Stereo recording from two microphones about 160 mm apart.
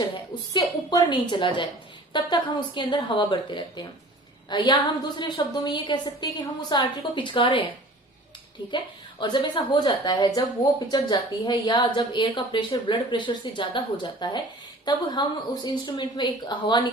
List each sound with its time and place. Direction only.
0.5 s speech: 25° left (ahead or behind)
9.2 s speech: 25° left (ahead or behind)